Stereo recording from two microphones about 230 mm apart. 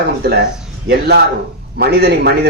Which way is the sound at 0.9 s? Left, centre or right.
Right.